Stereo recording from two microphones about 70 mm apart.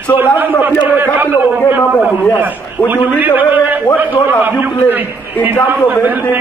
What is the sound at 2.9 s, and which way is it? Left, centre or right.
A man's voice, right.